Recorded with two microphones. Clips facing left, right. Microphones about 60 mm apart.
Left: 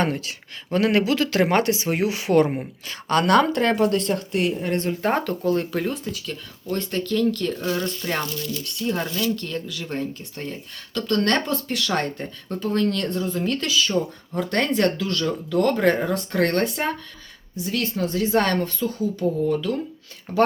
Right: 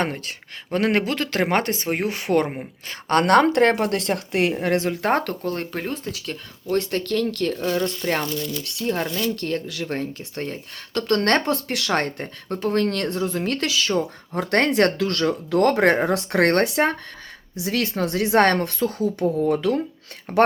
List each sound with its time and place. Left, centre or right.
0.0 s speech: right
5.4 s speech: right
6.2 s speech: right
7.9 s speech: right
8.8 s speech: right
9.2 s speech: right
17.6 s speech: right
17.9 s speech: right
19.4 s speech: right